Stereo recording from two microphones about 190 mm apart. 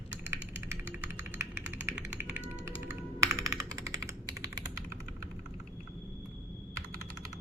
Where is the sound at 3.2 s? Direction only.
15° right (ahead or behind).